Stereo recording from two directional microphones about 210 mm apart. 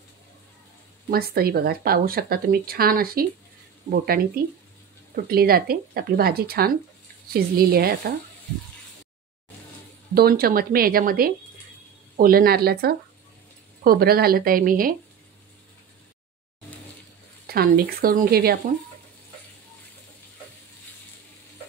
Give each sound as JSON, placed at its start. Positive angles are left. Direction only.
{"t": 1.1, "sound": "speech", "side_deg": -45}
{"t": 10.1, "sound": "speech", "side_deg": -45}
{"t": 17.5, "sound": "speech", "side_deg": -45}